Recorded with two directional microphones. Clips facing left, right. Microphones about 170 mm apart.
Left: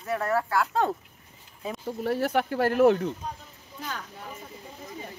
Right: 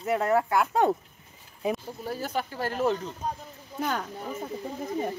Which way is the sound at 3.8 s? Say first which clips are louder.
Right 8 dB; 60° right (ahead or behind).